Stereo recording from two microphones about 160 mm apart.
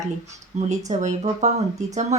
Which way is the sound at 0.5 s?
45° right (ahead or behind).